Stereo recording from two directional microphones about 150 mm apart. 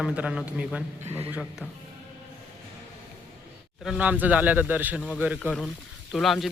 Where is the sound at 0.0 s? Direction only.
5° right (ahead or behind).